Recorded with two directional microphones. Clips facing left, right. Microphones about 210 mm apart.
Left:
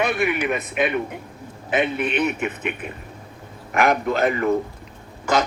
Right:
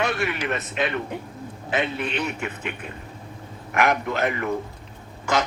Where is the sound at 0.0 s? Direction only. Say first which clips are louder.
Left 4 dB; 15° left (ahead or behind).